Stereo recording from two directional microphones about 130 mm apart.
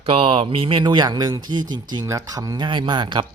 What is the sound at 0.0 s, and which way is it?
Speech, 45° right (ahead or behind).